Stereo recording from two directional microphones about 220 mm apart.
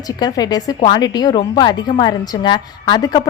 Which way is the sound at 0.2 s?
20° left (ahead or behind).